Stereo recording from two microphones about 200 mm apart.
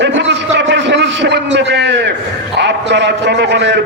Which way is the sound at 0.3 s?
60° right (ahead or behind).